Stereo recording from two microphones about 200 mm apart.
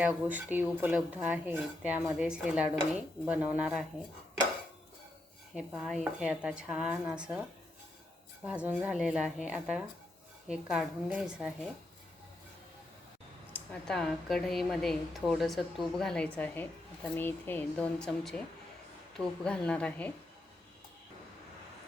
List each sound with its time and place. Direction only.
0.0 s speech: 5° right (ahead or behind)
5.5 s a woman's voice: centre (ahead or behind)
8.4 s a woman's voice: 5° right (ahead or behind)
13.5 s a woman's voice: 5° left (ahead or behind)